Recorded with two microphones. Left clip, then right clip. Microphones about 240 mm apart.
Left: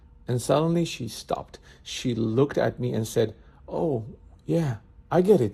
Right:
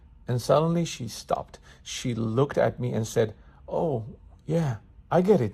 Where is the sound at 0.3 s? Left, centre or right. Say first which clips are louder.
Right 1 dB; centre.